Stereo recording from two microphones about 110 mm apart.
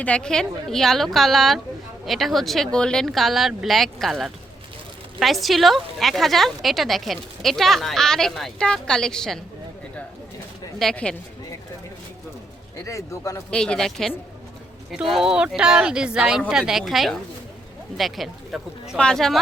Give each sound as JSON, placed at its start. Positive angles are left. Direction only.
{"t": 0.0, "sound": "a woman's voice", "side_deg": 10}
{"t": 10.8, "sound": "speech", "side_deg": 5}
{"t": 12.8, "sound": "speech", "side_deg": 30}
{"t": 13.5, "sound": "a woman's voice", "side_deg": 5}